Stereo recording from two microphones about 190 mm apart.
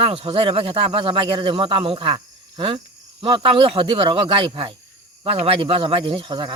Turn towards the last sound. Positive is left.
turn(degrees=-25)  # may be behind; listen again after turning